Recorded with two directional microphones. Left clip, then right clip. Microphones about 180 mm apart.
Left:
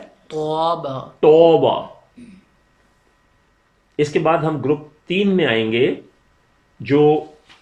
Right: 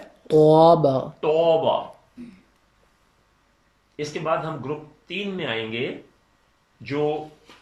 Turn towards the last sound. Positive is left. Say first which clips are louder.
# left 11 dB
turn(degrees=50)  # may be behind; listen again after turning